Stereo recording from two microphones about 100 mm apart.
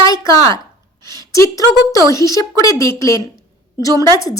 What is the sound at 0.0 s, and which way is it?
A woman's voice, 35° left (ahead or behind).